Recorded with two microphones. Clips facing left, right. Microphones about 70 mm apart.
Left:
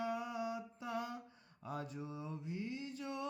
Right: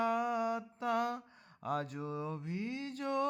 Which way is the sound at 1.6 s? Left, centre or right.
Right.